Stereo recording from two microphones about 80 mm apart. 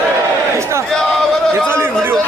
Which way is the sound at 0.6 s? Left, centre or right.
Right.